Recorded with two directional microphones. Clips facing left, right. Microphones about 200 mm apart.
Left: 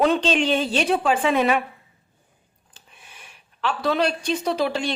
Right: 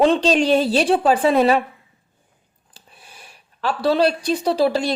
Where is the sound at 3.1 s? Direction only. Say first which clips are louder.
Right 3 dB; 40° right (ahead or behind).